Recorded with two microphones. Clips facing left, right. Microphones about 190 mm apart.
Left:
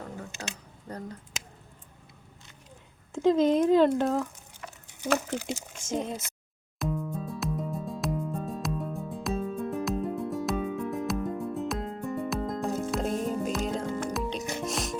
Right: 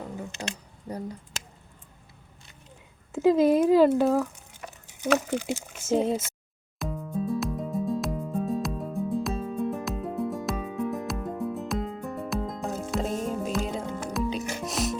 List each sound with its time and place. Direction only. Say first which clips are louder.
0.9 s a sound: right 4 dB; 10° right (ahead or behind)
3.1 s speech: right 2 dB; 5° right (ahead or behind)
5.5 s speech: right 4 dB; 5° right (ahead or behind)
5.9 s speech: right 7 dB; 30° right (ahead or behind)
6.7 s music: even; centre (ahead or behind)